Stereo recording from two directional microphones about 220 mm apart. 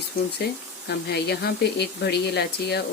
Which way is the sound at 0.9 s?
50° left (ahead or behind).